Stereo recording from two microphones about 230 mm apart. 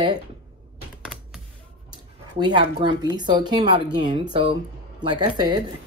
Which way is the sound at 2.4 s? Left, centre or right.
Centre.